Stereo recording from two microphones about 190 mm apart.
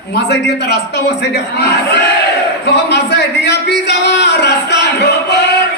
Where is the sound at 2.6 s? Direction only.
65° left (ahead or behind).